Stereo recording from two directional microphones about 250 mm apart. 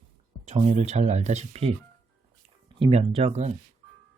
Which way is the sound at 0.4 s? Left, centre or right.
Right.